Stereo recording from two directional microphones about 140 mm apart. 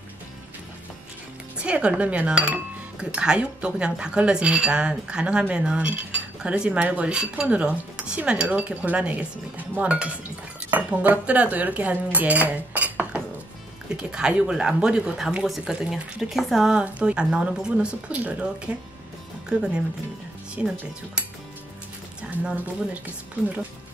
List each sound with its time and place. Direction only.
1.6 s speech: 10° right (ahead or behind)
22.3 s speech: 5° right (ahead or behind)